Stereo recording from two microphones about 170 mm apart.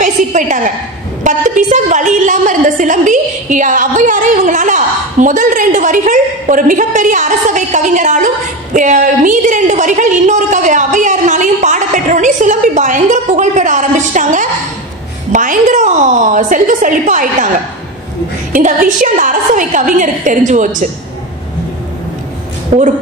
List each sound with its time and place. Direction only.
0.0 s a woman's voice: 50° right (ahead or behind)
8.7 s a sound: 50° right (ahead or behind)
15.3 s a woman's voice: 45° right (ahead or behind)
18.5 s a woman's voice: 50° right (ahead or behind)
22.7 s a woman's voice: 40° right (ahead or behind)